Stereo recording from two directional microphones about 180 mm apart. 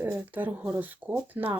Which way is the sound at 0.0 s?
10° right (ahead or behind).